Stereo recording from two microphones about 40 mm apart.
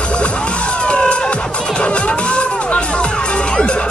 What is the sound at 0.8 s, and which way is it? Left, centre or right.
Music, left.